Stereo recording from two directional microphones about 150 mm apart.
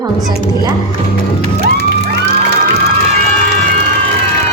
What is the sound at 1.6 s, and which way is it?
Music, 90° right.